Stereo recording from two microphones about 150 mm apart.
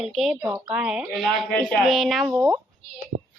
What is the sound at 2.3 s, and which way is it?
Speech, 15° right (ahead or behind).